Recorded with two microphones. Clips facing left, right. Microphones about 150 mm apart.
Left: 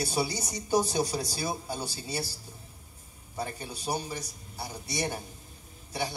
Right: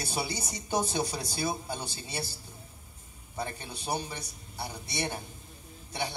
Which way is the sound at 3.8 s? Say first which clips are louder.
Left 1 dB; 10° left (ahead or behind).